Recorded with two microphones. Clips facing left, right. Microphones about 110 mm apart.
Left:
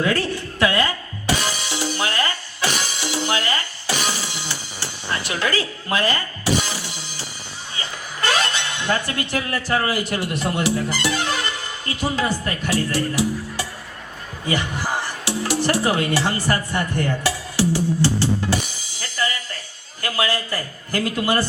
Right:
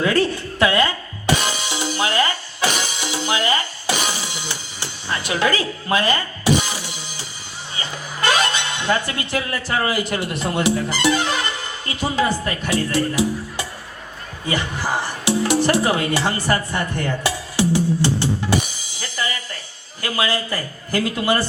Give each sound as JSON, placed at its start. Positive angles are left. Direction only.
{"t": 0.0, "sound": "music", "side_deg": -20}
{"t": 7.8, "sound": "speech", "side_deg": -15}
{"t": 14.8, "sound": "music", "side_deg": -15}
{"t": 20.0, "sound": "a man's voice", "side_deg": -15}